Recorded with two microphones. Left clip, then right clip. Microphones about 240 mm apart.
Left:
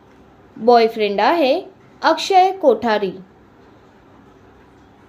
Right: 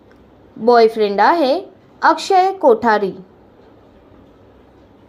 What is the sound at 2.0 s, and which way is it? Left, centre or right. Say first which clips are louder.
A woman's voice: right 1 dB; centre.